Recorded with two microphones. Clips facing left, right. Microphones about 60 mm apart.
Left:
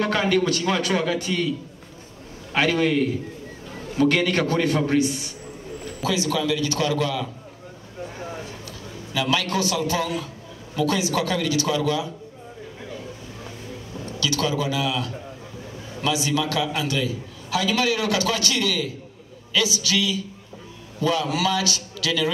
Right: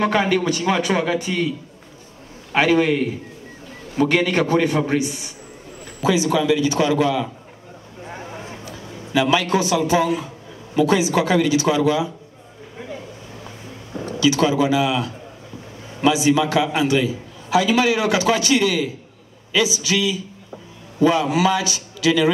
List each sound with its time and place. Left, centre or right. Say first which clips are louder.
0.0 s a man's voice: right 2 dB; centre
2.5 s a man's voice: right 4 dB; centre
14.2 s a man's voice: right 7 dB; right